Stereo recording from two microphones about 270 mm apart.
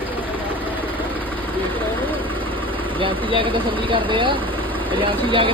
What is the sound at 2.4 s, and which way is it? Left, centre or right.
Speech, centre.